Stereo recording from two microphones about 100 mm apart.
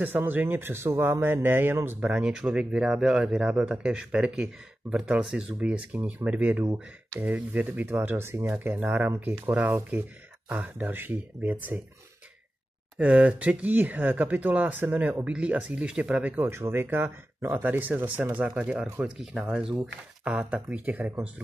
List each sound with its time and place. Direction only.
0.0 s a man's voice: 20° right (ahead or behind)
2.0 s a man's voice: 10° right (ahead or behind)
13.0 s speech: 15° right (ahead or behind)
20.2 s speech: 10° right (ahead or behind)